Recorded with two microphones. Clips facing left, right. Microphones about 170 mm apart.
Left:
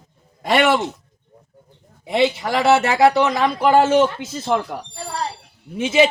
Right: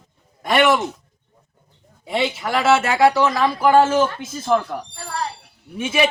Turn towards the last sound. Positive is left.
turn(degrees=25)  # may be behind; listen again after turning